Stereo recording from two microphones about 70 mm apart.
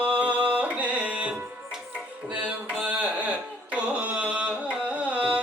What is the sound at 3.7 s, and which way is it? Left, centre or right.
Carnatic music, centre.